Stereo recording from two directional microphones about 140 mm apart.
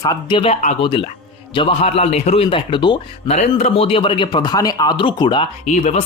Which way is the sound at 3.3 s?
50° left (ahead or behind).